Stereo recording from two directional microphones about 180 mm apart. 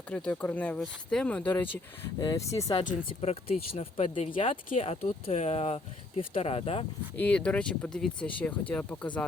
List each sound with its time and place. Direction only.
0.1 s speech: 10° left (ahead or behind)
3.2 s speech: 35° left (ahead or behind)
7.2 s speech: 5° left (ahead or behind)